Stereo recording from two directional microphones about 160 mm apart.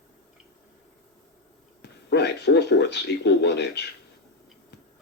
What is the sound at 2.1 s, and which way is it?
Speech, 90° left.